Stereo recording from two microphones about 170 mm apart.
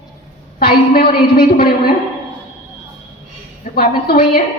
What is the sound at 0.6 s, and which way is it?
A woman's voice, 60° left (ahead or behind).